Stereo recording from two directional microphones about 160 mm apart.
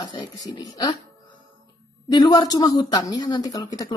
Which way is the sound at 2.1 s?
25° left (ahead or behind).